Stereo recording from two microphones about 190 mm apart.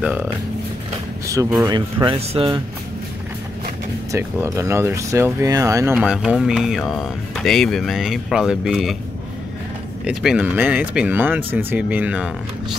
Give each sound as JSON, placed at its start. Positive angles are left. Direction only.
{"t": 0.0, "sound": "speech", "side_deg": -10}
{"t": 4.1, "sound": "speech", "side_deg": -15}
{"t": 5.9, "sound": "speech", "side_deg": -5}
{"t": 10.0, "sound": "speech", "side_deg": -5}